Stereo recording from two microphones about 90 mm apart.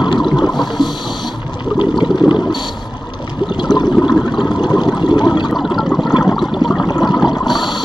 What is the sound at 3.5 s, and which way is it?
Water, 55° left (ahead or behind).